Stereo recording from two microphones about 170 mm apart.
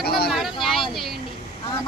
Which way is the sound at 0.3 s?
Centre (ahead or behind).